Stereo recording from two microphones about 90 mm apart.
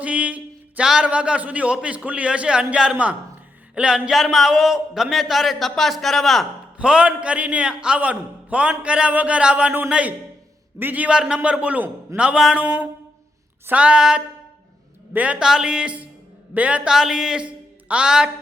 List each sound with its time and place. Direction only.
0.0 s music: 15° right (ahead or behind)
0.9 s a man's voice: 10° right (ahead or behind)
6.7 s a man's voice: 10° right (ahead or behind)